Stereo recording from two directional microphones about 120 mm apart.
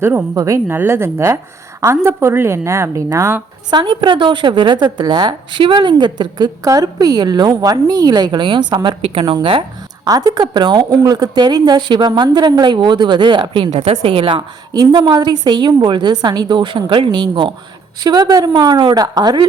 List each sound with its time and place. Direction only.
0.0 s a woman's voice: 20° right (ahead or behind)
3.7 s a woman's voice: 40° right (ahead or behind)
14.7 s a woman's voice: 35° right (ahead or behind)